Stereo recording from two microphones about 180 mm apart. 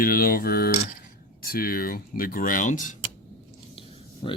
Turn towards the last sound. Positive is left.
turn(degrees=30)  # may be behind; listen again after turning